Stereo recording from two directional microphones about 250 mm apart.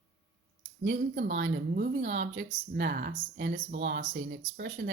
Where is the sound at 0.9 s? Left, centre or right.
Right.